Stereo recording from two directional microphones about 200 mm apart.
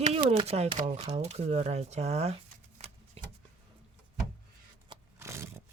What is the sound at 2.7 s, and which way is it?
Vehicle, 35° right (ahead or behind).